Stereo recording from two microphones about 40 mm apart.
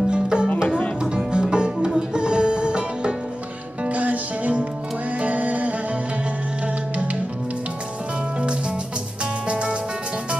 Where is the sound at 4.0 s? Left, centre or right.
Right.